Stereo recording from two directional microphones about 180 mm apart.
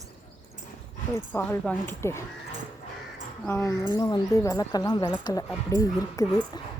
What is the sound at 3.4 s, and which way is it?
Speech, 15° left (ahead or behind).